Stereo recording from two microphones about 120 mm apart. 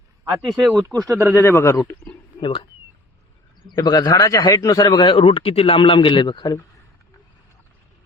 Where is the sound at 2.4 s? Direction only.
40° left (ahead or behind).